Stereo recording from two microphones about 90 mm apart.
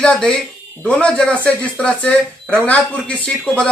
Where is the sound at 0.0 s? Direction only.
10° left (ahead or behind).